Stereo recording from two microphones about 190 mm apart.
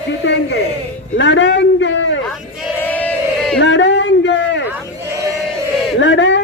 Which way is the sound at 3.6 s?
70° left (ahead or behind).